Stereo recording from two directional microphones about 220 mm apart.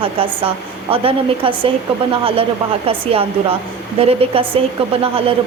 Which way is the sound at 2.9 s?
25° right (ahead or behind).